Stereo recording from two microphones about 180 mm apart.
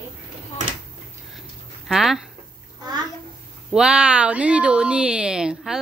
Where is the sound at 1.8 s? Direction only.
Centre (ahead or behind).